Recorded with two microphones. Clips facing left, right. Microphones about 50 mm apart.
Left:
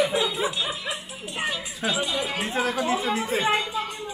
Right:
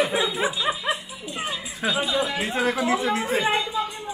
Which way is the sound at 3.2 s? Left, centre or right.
Right.